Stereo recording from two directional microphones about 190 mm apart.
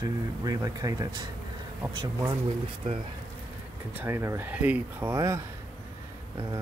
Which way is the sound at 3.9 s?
15° right (ahead or behind).